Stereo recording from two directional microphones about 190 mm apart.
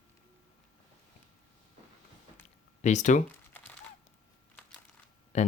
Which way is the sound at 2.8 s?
40° left (ahead or behind).